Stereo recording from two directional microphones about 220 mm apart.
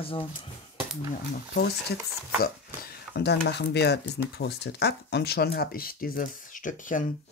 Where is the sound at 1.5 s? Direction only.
45° left (ahead or behind).